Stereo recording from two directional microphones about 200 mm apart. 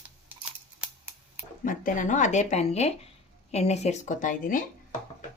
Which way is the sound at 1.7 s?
40° left (ahead or behind).